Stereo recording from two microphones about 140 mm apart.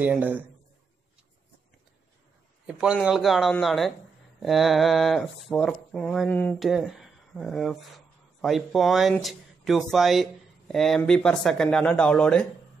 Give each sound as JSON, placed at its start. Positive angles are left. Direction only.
{"t": 0.0, "sound": "speech", "side_deg": -10}
{"t": 2.6, "sound": "speech", "side_deg": -5}